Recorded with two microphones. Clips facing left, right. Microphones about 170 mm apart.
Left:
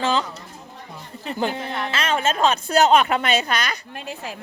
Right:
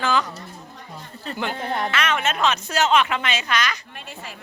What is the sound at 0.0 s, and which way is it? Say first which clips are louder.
Speech: even; 25° left (ahead or behind).